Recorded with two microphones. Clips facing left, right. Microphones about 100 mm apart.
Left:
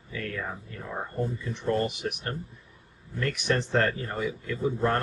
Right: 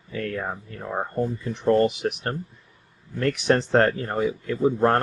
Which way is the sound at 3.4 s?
40° right (ahead or behind).